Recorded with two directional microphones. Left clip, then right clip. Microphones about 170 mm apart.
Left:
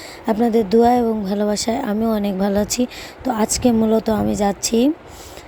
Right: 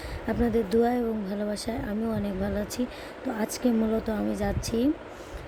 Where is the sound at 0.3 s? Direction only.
40° left (ahead or behind).